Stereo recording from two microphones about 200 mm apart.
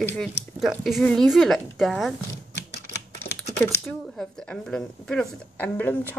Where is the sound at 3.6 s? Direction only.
10° left (ahead or behind).